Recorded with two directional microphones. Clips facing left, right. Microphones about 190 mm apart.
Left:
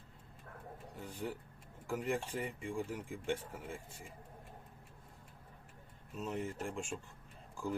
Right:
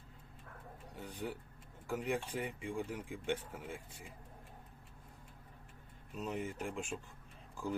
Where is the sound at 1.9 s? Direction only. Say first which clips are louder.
Even; 5° right (ahead or behind).